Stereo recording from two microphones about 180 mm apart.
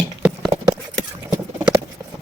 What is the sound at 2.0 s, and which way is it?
Clip-clop, 25° right (ahead or behind).